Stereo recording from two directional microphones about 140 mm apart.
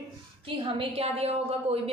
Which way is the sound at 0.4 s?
40° right (ahead or behind).